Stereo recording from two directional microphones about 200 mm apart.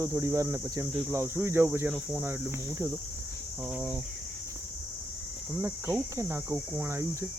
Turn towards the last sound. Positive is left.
turn(degrees=-15)  # may be behind; listen again after turning